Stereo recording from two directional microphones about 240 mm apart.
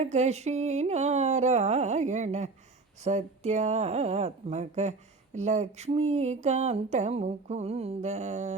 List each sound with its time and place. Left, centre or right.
0.0 s speech: right